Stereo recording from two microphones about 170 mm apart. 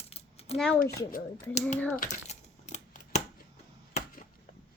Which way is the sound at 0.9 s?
60° left (ahead or behind).